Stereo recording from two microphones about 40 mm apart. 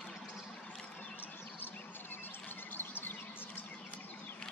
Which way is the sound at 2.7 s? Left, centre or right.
Left.